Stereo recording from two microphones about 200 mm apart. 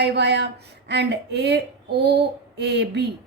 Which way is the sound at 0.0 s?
55° right (ahead or behind).